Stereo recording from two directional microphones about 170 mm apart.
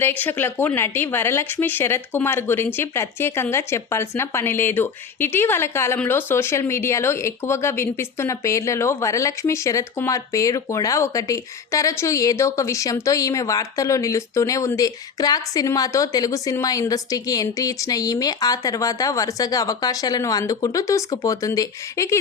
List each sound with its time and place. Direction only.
0.0 s speech: 10° left (ahead or behind)